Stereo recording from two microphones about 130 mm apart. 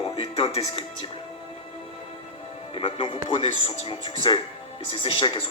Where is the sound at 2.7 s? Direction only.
45° left (ahead or behind).